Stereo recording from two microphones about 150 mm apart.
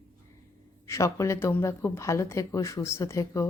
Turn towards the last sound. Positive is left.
turn(degrees=20)  # may be behind; listen again after turning